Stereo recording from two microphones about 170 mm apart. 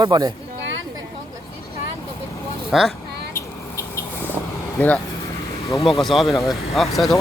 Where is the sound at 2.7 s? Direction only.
Centre (ahead or behind).